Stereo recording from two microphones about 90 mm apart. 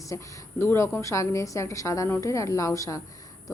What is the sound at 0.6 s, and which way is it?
Speech, 25° left (ahead or behind).